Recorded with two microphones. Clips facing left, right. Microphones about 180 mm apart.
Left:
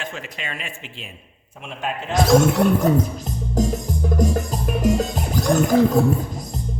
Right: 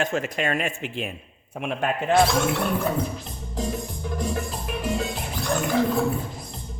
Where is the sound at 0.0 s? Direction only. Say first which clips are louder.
Right 8 dB; 45° right (ahead or behind).